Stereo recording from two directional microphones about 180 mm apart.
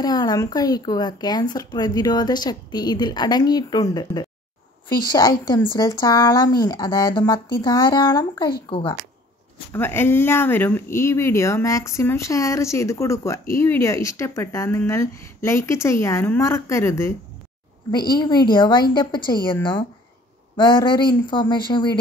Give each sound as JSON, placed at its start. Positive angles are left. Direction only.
{"t": 0.0, "sound": "speech", "side_deg": 20}
{"t": 9.7, "sound": "speech", "side_deg": 10}
{"t": 18.1, "sound": "speech", "side_deg": 25}